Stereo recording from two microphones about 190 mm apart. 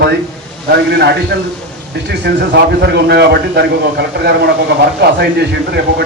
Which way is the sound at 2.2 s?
60° right (ahead or behind).